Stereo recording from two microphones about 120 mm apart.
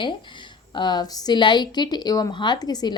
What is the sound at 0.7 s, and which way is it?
A woman's voice, 40° left (ahead or behind).